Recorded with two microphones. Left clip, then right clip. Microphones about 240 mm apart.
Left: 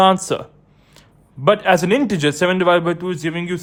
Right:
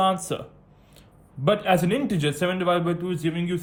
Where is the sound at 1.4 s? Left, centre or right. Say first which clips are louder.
Left 7 dB; left.